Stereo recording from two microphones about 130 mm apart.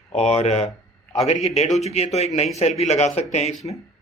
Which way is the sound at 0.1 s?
55° left (ahead or behind).